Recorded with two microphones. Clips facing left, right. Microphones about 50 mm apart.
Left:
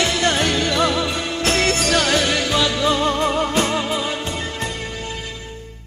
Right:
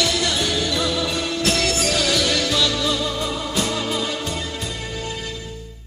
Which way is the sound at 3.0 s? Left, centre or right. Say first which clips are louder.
Left 6 dB; left.